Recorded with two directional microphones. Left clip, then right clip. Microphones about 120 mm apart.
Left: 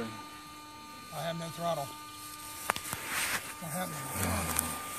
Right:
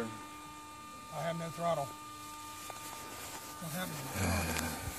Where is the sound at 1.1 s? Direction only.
Centre (ahead or behind).